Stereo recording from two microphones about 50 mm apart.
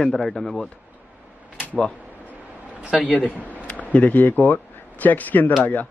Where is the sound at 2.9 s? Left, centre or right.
Left.